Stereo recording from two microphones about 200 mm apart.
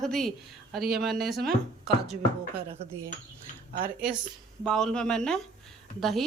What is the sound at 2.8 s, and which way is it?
Speech, 30° right (ahead or behind).